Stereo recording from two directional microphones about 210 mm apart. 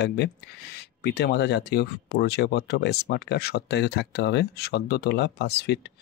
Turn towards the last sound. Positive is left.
turn(degrees=50)  # may be behind; listen again after turning